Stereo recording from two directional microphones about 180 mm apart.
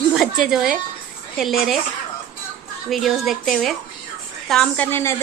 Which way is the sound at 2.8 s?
Centre (ahead or behind).